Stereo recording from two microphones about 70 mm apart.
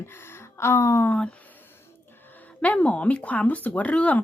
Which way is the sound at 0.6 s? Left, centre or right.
Left.